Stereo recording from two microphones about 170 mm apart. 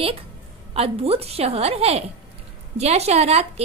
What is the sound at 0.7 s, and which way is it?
A woman's voice, 35° right (ahead or behind).